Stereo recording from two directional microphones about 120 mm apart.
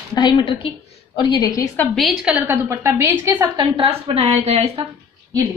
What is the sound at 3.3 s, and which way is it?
Speech, 35° right (ahead or behind).